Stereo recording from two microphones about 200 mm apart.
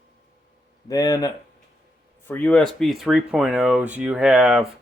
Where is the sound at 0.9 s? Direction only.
15° left (ahead or behind); by 4.6 s 5° right (ahead or behind).